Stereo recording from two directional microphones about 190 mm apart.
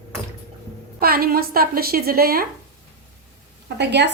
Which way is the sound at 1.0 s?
50° right (ahead or behind).